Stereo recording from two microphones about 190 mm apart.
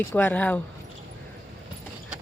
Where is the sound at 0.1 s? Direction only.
10° left (ahead or behind).